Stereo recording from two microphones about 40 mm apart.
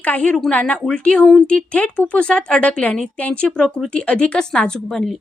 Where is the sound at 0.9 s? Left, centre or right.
Left.